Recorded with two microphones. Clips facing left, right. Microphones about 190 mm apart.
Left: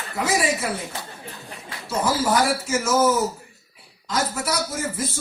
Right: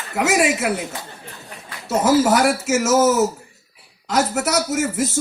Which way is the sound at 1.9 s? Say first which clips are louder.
Right 6 dB; 75° right (ahead or behind).